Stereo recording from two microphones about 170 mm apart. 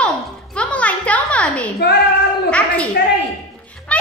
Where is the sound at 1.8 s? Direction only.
70° left (ahead or behind).